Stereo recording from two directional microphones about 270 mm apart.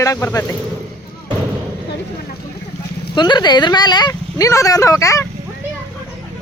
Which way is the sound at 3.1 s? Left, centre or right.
Centre.